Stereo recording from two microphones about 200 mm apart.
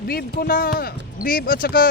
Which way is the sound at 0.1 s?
50° left (ahead or behind).